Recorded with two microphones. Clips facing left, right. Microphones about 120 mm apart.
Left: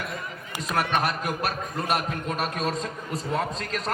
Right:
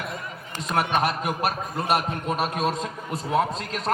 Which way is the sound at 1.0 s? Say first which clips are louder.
Right 3 dB; centre (ahead or behind).